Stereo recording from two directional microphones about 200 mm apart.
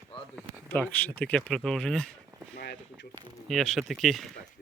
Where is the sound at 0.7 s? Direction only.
10° left (ahead or behind).